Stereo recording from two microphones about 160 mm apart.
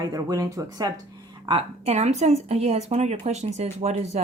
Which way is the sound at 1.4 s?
35° right (ahead or behind).